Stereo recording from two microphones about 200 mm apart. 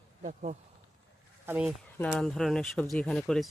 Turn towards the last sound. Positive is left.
turn(degrees=0)  # may be behind; listen again after turning